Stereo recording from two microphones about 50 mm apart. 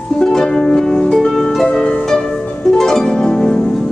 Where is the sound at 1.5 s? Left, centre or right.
Centre.